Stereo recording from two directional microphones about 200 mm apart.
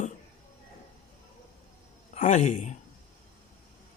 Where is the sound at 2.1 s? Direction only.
35° left (ahead or behind).